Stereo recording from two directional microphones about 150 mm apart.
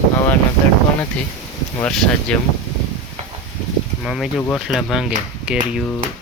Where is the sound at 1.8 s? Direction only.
Centre (ahead or behind).